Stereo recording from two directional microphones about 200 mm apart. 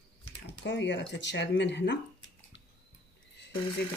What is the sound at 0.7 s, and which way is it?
Speech, 60° left (ahead or behind).